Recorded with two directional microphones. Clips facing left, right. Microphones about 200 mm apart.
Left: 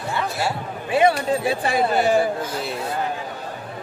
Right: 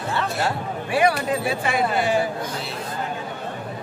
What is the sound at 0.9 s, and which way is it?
Speech, 25° left (ahead or behind).